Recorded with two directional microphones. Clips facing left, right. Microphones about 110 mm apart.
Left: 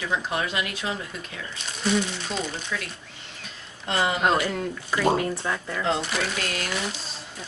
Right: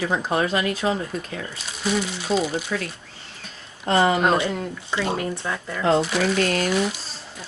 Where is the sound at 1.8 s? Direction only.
5° right (ahead or behind).